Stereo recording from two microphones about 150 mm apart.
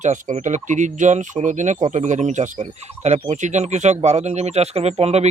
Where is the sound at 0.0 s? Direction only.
55° right (ahead or behind).